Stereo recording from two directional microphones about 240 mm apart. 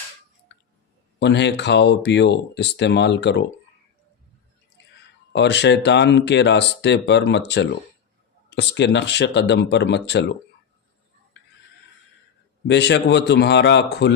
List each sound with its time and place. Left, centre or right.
0.5 s a sound: left
1.2 s speech: left
5.3 s speech: left
12.6 s speech: left